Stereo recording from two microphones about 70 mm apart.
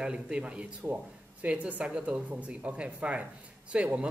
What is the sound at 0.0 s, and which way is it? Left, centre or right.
Speech, centre.